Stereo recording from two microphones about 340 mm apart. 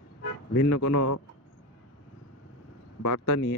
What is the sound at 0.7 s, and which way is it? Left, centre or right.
Speech, left.